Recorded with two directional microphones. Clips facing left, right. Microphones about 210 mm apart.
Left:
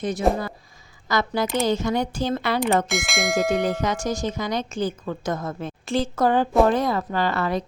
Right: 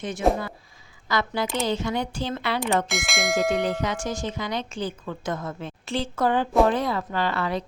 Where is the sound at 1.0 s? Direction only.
40° left (ahead or behind).